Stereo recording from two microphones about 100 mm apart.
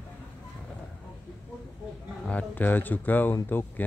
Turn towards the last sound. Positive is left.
turn(degrees=20)  # may be behind; listen again after turning